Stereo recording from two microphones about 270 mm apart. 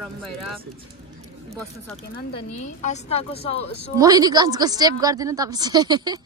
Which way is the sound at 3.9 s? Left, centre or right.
Centre.